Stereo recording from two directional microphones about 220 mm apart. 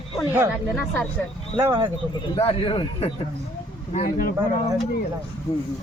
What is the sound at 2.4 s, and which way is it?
Speech, 25° left (ahead or behind).